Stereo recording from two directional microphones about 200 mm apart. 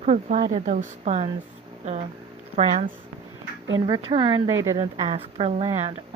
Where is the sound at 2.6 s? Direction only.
35° right (ahead or behind).